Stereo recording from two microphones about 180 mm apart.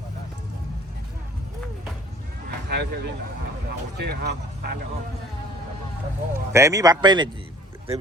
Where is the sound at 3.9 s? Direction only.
65° right (ahead or behind).